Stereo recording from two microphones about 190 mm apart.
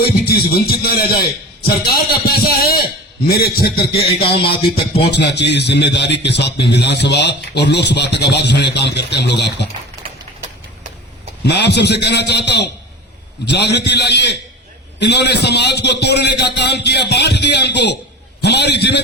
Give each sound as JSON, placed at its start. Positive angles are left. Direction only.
{"t": 0.0, "sound": "a man's voice", "side_deg": 55}
{"t": 5.1, "sound": "a man's voice", "side_deg": 65}
{"t": 11.4, "sound": "a man's voice", "side_deg": 60}